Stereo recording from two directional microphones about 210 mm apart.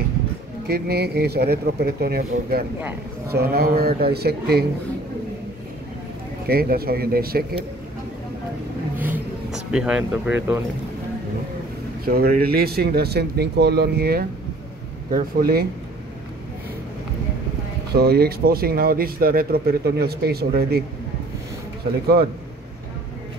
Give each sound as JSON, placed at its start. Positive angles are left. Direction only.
{"t": 0.7, "sound": "speech", "side_deg": -50}
{"t": 6.4, "sound": "speech", "side_deg": -45}
{"t": 9.0, "sound": "vehicle", "side_deg": -5}
{"t": 12.0, "sound": "speech", "side_deg": -45}
{"t": 17.9, "sound": "speech", "side_deg": -50}